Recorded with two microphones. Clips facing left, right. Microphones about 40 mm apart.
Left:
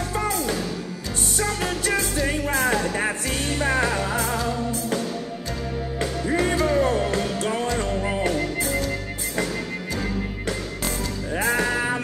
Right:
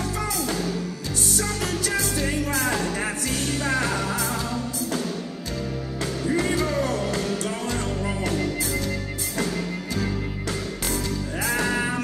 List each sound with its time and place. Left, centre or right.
1.4 s music: left
6.3 s music: left
11.3 s music: left
11.7 s music: centre